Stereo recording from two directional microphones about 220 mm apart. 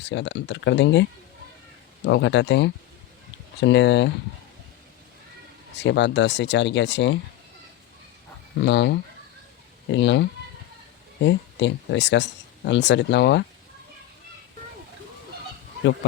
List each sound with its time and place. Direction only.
0.0 s speech: 55° left (ahead or behind)
2.0 s speech: 55° left (ahead or behind)
5.7 s speech: 55° left (ahead or behind)
8.6 s speech: 50° left (ahead or behind)